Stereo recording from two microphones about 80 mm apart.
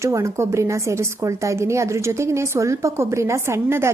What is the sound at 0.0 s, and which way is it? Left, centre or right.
A woman's voice, right.